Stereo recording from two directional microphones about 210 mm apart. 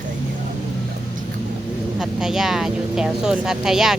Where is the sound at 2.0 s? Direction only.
Centre (ahead or behind).